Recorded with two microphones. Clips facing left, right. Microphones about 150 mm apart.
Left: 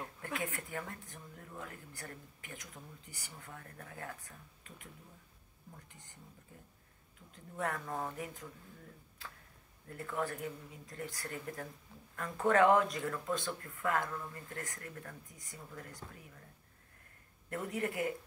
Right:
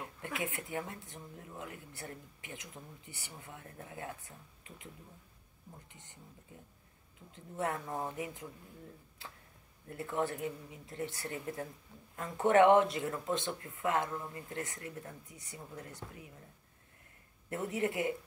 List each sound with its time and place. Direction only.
0.0 s speech: 20° right (ahead or behind)
7.2 s speech: 20° right (ahead or behind)
17.5 s speech: 20° right (ahead or behind)